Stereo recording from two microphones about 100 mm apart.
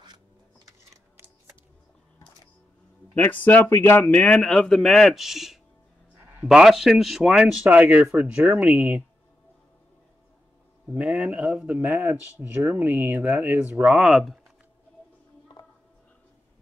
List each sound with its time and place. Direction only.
0.7 s typing: 25° right (ahead or behind)
3.2 s speech: 20° left (ahead or behind)
4.0 s a man's voice: 15° left (ahead or behind); by 9.0 s 15° right (ahead or behind)
10.9 s a man's voice: 10° right (ahead or behind)